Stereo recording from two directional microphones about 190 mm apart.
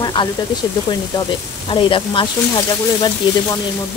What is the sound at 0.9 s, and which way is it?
Speech, 25° left (ahead or behind).